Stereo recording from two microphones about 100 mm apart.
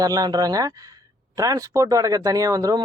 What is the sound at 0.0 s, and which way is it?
Speech, 40° right (ahead or behind).